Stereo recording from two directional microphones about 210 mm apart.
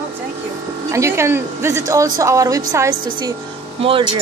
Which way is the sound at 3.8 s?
25° right (ahead or behind).